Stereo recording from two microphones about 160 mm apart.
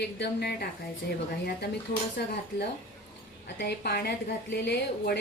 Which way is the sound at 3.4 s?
90° left.